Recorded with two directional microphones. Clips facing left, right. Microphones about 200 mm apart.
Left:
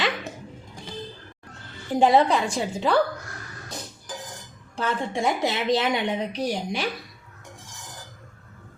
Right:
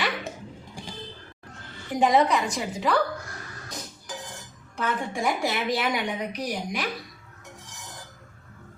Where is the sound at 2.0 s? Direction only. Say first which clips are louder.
Left 2 dB; 30° left (ahead or behind).